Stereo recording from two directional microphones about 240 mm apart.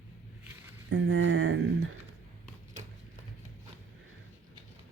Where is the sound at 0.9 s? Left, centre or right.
Right.